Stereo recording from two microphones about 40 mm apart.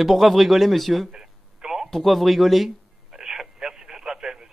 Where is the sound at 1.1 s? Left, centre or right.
Centre.